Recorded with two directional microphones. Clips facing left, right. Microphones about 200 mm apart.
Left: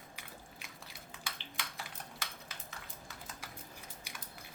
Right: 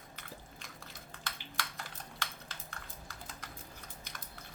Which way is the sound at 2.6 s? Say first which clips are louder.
Even; 5° left (ahead or behind).